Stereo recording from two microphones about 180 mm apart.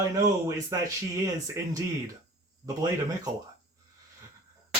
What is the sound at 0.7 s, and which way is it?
Speech, 15° right (ahead or behind).